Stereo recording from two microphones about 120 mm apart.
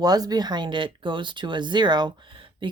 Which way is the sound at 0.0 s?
35° right (ahead or behind).